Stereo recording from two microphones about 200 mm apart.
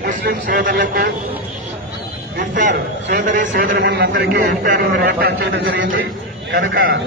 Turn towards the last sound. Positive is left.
turn(degrees=-45)  # may be behind; listen again after turning